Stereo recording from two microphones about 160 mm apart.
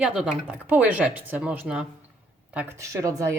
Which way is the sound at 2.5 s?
20° right (ahead or behind).